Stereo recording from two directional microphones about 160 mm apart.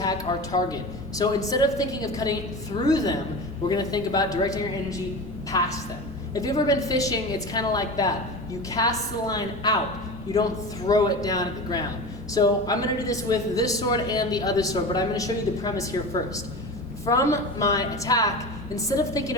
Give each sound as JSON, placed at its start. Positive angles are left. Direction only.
{"t": 0.0, "sound": "speech", "side_deg": 25}
{"t": 10.8, "sound": "speech", "side_deg": 25}